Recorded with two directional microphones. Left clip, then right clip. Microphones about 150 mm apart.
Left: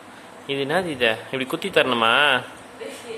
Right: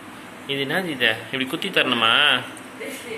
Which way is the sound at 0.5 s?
90° left.